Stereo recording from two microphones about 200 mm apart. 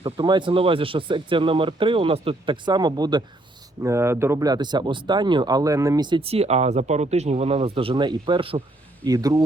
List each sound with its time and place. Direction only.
0.0 s speech: 25° right (ahead or behind)